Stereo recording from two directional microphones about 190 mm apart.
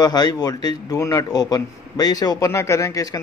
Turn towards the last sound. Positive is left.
turn(degrees=15)  # may be behind; listen again after turning